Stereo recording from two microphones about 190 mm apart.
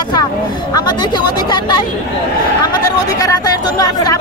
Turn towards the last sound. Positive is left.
turn(degrees=20)  # may be behind; listen again after turning